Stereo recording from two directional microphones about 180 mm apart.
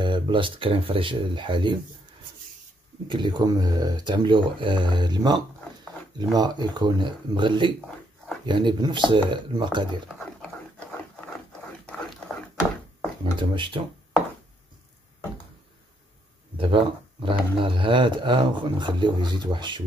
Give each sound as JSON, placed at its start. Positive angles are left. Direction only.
{"t": 0.0, "sound": "speech", "side_deg": -25}
{"t": 3.1, "sound": "speech", "side_deg": -25}
{"t": 10.0, "sound": "a sound", "side_deg": 0}
{"t": 13.2, "sound": "speech", "side_deg": -25}
{"t": 16.5, "sound": "speech", "side_deg": -30}